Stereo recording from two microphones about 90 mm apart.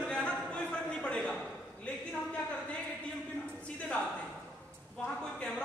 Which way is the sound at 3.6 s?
15° left (ahead or behind).